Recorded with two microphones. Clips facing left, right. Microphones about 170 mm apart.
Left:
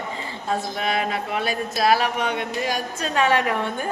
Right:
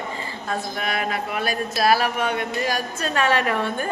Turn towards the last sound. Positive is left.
turn(degrees=15)  # may be behind; listen again after turning